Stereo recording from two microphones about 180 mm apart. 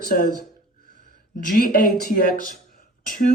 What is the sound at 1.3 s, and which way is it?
Speech, 50° left (ahead or behind).